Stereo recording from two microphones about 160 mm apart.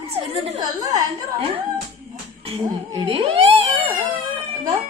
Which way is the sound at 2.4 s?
35° right (ahead or behind).